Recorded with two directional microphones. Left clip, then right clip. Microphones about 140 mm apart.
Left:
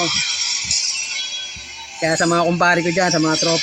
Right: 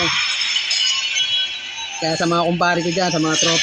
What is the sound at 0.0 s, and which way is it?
Music, 5° left (ahead or behind).